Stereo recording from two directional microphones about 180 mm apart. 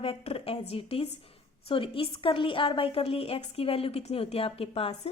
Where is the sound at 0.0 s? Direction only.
30° left (ahead or behind).